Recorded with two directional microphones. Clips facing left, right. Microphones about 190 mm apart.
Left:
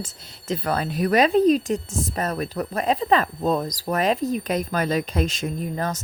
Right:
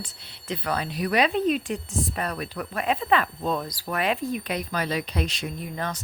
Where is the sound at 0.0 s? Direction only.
45° left (ahead or behind).